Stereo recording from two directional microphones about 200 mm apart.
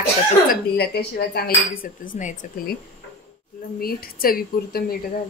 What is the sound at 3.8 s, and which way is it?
Speech, 50° left (ahead or behind).